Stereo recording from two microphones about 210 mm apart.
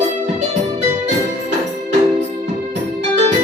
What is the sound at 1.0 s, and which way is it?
Music, 35° right (ahead or behind).